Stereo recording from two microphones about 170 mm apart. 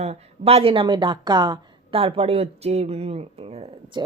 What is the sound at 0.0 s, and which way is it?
A woman's voice, 35° right (ahead or behind).